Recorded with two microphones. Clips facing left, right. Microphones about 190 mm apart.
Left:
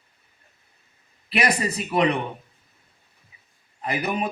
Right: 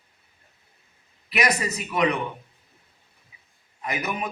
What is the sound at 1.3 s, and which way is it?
Speech, 30° left (ahead or behind).